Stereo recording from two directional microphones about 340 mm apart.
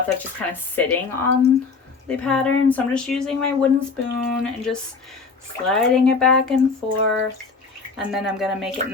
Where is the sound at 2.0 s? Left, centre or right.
Centre.